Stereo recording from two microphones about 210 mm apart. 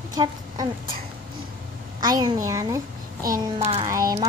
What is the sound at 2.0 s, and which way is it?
Speech, 20° right (ahead or behind).